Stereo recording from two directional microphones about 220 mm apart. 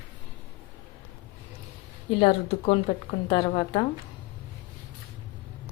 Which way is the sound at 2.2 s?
25° left (ahead or behind).